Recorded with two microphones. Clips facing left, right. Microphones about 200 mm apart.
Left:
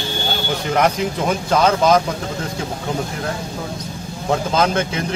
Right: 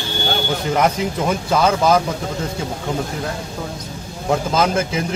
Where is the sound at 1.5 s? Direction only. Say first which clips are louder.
Left 1 dB; 5° right (ahead or behind).